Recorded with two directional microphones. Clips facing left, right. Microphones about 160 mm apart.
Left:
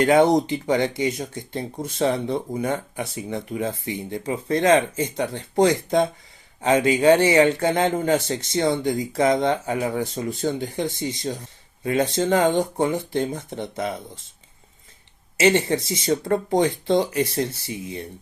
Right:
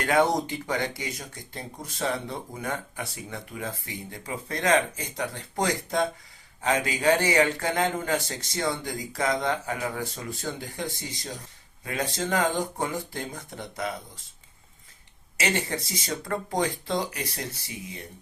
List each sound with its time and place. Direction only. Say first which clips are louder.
0.0 s speech: left 7 dB; 20° left (ahead or behind)
15.4 s speech: left 10 dB; 25° left (ahead or behind)